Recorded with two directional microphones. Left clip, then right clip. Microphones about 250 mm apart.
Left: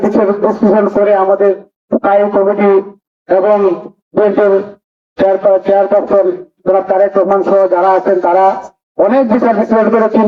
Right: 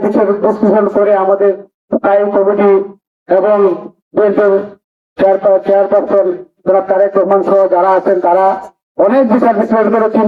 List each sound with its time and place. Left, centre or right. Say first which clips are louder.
0.1 s a man's voice: even; left